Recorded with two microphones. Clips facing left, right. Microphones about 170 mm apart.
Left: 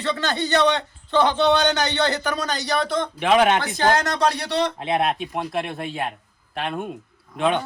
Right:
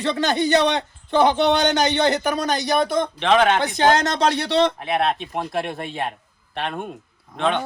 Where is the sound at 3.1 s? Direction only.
10° left (ahead or behind).